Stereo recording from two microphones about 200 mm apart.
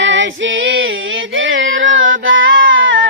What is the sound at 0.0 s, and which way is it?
Female singing, 65° right (ahead or behind).